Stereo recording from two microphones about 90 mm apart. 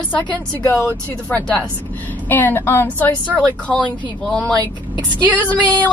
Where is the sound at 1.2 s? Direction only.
20° left (ahead or behind).